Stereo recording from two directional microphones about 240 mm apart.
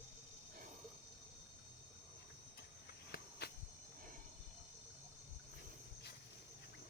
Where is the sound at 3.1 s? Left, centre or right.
Left.